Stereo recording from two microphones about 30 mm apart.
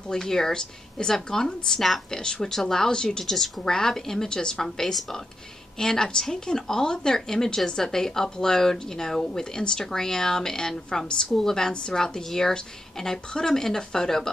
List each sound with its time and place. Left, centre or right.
0.1 s speech: centre
3.3 s speech: centre
3.6 s speech: centre
11.3 s speech: centre